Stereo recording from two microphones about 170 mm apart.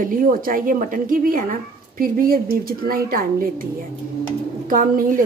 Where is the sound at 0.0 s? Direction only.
55° right (ahead or behind).